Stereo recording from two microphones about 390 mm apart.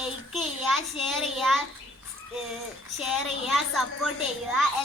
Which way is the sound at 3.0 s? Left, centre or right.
Centre.